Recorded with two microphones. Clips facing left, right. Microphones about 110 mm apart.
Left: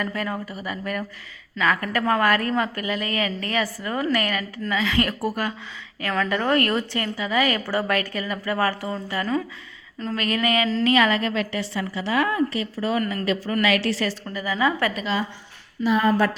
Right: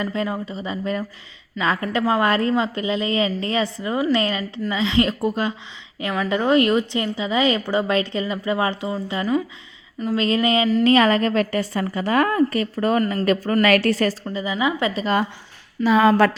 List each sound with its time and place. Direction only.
0.0 s a woman's voice: 20° right (ahead or behind)
10.2 s a woman's voice: 25° right (ahead or behind)
10.8 s a woman's voice: 35° right (ahead or behind)
13.0 s speech: 30° right (ahead or behind)
13.2 s a woman's voice: 45° right (ahead or behind)
14.3 s a woman's voice: 20° right (ahead or behind)
15.0 s a woman's voice: 55° right (ahead or behind)
15.8 s speech: 90° right